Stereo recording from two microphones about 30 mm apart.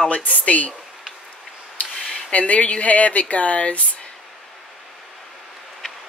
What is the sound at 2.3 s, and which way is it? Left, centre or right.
Speech, left.